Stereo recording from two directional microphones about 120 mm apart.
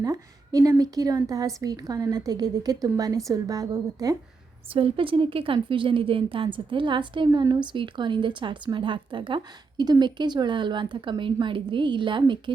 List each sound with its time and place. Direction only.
0.0 s a woman's voice: 30° right (ahead or behind)
4.7 s a woman's voice: 50° right (ahead or behind)